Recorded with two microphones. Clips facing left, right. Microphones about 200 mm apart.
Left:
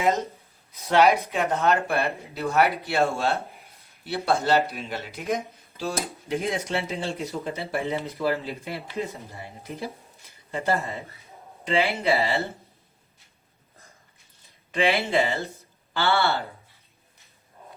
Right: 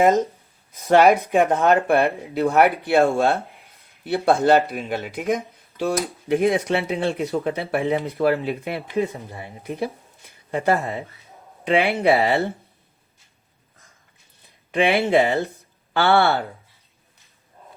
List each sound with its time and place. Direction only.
0.7 s speech: 50° right (ahead or behind)
14.7 s speech: 55° right (ahead or behind)